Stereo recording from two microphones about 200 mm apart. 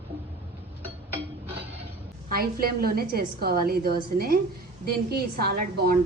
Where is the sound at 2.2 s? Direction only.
50° right (ahead or behind).